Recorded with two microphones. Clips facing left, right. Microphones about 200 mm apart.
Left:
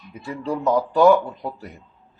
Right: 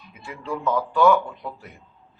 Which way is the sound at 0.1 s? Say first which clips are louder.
Left 5 dB; 40° left (ahead or behind).